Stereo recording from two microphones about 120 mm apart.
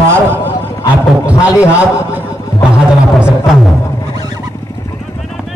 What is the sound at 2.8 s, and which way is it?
Speech, 5° right (ahead or behind).